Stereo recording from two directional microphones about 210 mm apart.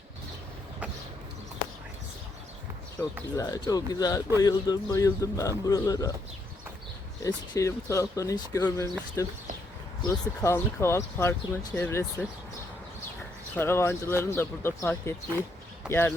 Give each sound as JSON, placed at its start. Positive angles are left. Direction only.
{"t": 3.0, "sound": "speech", "side_deg": 15}
{"t": 7.3, "sound": "speech", "side_deg": 15}
{"t": 13.6, "sound": "speech", "side_deg": 10}